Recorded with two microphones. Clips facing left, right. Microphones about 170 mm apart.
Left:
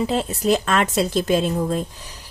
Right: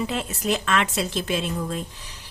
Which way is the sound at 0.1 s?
35° left (ahead or behind).